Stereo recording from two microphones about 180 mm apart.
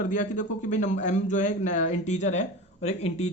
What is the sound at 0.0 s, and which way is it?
Speech, 45° left (ahead or behind).